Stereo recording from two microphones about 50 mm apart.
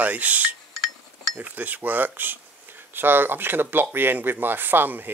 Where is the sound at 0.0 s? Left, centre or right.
Right.